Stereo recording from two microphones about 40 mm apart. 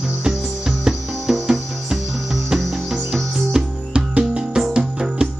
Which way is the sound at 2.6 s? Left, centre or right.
Centre.